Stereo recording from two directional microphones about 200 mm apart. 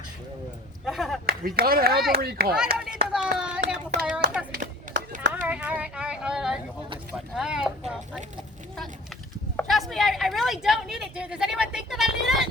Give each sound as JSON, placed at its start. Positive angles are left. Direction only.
{"t": 0.9, "sound": "speech", "side_deg": 0}
{"t": 1.3, "sound": "speech", "side_deg": -50}
{"t": 2.7, "sound": "speech", "side_deg": -5}
{"t": 5.3, "sound": "a sound", "side_deg": -5}
{"t": 7.3, "sound": "speech", "side_deg": -5}
{"t": 9.6, "sound": "speech", "side_deg": 0}